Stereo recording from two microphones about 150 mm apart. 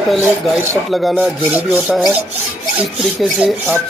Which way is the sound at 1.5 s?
15° right (ahead or behind).